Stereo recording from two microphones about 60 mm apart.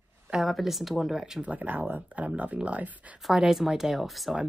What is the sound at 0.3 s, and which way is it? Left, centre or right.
Speech, centre.